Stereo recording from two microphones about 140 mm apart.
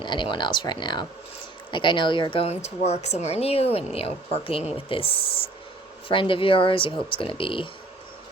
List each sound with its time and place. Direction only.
0.0 s speech: 35° left (ahead or behind)